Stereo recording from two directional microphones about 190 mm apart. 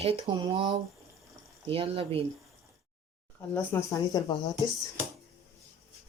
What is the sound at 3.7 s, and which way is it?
Speech, 15° left (ahead or behind).